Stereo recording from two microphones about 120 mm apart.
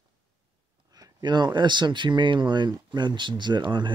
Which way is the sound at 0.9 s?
35° right (ahead or behind).